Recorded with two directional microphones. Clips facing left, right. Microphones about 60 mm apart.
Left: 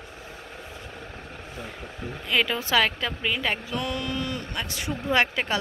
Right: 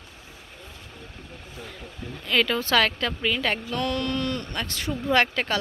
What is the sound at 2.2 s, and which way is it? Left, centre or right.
Speech, centre.